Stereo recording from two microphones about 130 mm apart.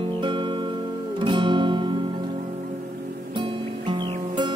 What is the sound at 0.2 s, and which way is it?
Music, 40° right (ahead or behind).